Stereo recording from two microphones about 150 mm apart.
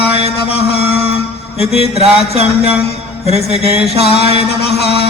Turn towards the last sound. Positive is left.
turn(degrees=-40)  # may be behind; listen again after turning